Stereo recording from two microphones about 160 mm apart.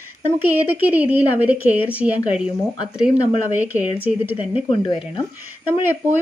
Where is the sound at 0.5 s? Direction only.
10° right (ahead or behind).